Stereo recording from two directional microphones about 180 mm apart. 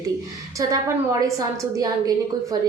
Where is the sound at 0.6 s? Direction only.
15° right (ahead or behind).